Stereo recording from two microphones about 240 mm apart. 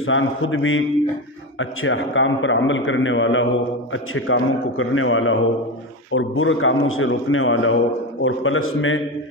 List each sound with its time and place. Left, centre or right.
0.0 s a man's voice: left